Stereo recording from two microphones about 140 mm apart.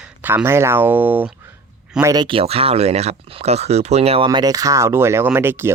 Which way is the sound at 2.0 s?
30° right (ahead or behind).